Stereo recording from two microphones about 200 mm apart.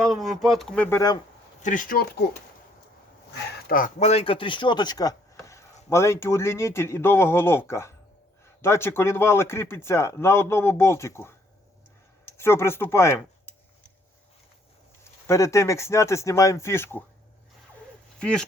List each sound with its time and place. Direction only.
0.0 s speech: centre (ahead or behind)
0.9 s speech: 15° left (ahead or behind)
1.6 s speech: 40° left (ahead or behind)
3.7 s speech: 45° left (ahead or behind); by 11.3 s 15° left (ahead or behind)
12.4 s speech: 10° left (ahead or behind)
15.3 s speech: 15° left (ahead or behind)
18.2 s speech: 5° left (ahead or behind)